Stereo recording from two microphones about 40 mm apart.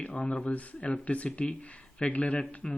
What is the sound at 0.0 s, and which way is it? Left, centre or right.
Speech, left.